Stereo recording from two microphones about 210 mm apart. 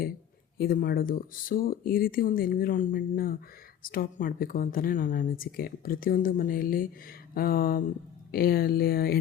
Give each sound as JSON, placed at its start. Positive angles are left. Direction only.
{"t": 0.6, "sound": "speech", "side_deg": 45}